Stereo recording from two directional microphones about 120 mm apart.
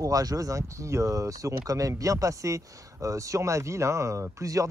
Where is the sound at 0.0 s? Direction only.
30° right (ahead or behind).